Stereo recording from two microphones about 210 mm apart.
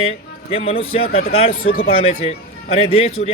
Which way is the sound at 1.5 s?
80° left.